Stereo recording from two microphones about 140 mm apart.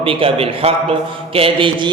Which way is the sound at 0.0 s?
40° right (ahead or behind).